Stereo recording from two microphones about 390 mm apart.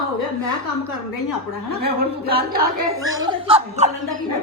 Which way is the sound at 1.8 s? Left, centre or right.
Right.